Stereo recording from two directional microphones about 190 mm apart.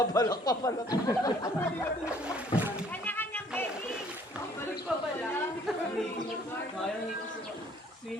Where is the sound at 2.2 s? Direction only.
5° right (ahead or behind).